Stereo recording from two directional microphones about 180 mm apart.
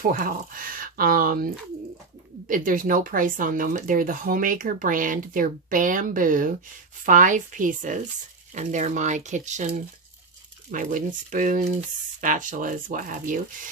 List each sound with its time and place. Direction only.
0.0 s speech: 50° right (ahead or behind)
10.7 s speech: 50° right (ahead or behind)